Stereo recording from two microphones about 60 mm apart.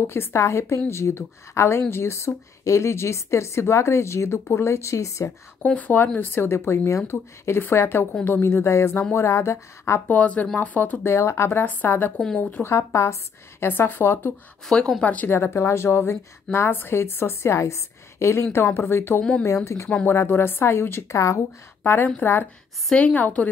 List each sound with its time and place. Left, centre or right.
0.0 s a woman's voice: left
5.8 s a woman's voice: left
10.0 s speech: left
11.1 s a woman's voice: left
12.4 s speech: left
12.6 s a woman's voice: left
13.7 s a woman's voice: left
15.0 s speech: left
15.2 s a woman's voice: left
19.4 s speech: left
20.1 s a woman's voice: left
21.1 s speech: left
21.8 s a woman's voice: left
22.9 s speech: left